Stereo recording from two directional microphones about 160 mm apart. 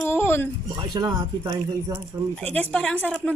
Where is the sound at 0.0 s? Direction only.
15° left (ahead or behind).